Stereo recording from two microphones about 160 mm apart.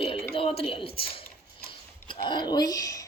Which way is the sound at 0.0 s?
35° left (ahead or behind).